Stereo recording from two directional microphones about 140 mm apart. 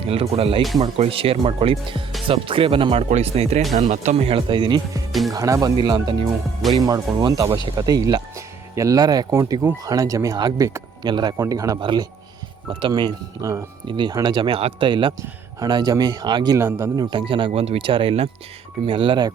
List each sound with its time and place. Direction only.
0.1 s speech: 45° right (ahead or behind)
5.3 s speech: 25° right (ahead or behind)
16.6 s a man's voice: 20° right (ahead or behind)
17.0 s speech: 30° right (ahead or behind)